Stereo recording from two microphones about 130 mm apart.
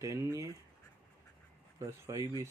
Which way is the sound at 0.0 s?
25° right (ahead or behind).